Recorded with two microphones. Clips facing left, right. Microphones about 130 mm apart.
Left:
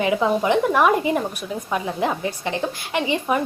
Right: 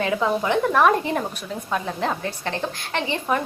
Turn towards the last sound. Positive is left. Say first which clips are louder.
# left 2 dB
turn(degrees=10)  # may be behind; listen again after turning